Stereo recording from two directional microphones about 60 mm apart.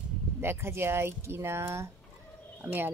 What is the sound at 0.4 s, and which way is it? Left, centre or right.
Speech, right.